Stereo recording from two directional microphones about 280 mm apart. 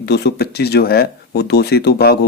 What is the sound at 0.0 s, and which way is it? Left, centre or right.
Speech, left.